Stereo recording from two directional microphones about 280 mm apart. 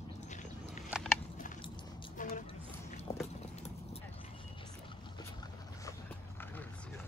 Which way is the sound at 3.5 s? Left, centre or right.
Left.